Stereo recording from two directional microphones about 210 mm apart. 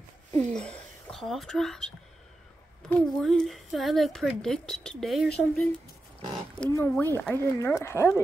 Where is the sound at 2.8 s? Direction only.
5° left (ahead or behind).